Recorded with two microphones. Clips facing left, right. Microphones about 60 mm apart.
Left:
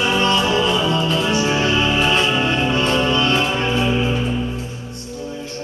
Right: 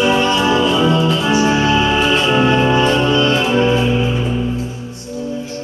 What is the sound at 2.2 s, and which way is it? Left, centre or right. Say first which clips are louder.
Music: right 5 dB; right.